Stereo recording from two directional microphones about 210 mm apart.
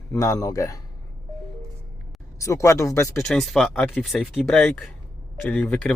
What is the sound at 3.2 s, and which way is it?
Speech, centre (ahead or behind).